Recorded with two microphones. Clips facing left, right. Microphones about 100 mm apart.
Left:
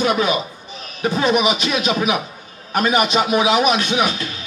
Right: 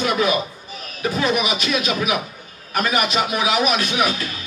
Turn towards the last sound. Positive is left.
turn(degrees=25)  # may be behind; listen again after turning